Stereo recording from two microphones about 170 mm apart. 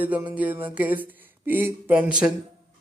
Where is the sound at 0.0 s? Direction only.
10° right (ahead or behind).